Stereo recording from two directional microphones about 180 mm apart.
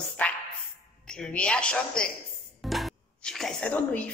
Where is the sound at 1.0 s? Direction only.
5° left (ahead or behind).